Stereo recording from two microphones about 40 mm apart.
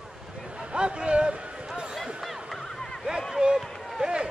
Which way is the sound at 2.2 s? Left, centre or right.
Centre.